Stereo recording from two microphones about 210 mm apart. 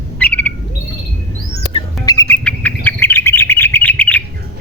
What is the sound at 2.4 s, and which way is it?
Bird, 10° left (ahead or behind).